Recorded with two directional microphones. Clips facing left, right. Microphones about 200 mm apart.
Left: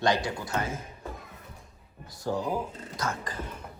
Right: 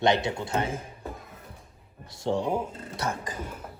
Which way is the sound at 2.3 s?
25° right (ahead or behind).